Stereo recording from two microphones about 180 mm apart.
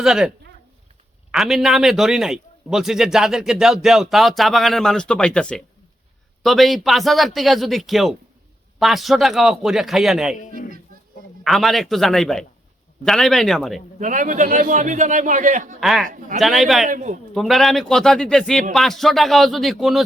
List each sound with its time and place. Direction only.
0.0 s a man's voice: 5° right (ahead or behind)
1.3 s a man's voice: centre (ahead or behind)
10.4 s speech: 45° left (ahead or behind)
11.4 s a man's voice: centre (ahead or behind)
14.0 s a man's voice: 45° right (ahead or behind)
15.8 s a man's voice: centre (ahead or behind)
16.0 s a man's voice: 50° right (ahead or behind)
16.4 s a man's voice: centre (ahead or behind)
16.8 s a man's voice: 45° right (ahead or behind)
17.3 s a man's voice: centre (ahead or behind)